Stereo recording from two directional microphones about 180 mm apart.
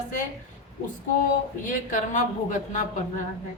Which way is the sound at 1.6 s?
45° left (ahead or behind).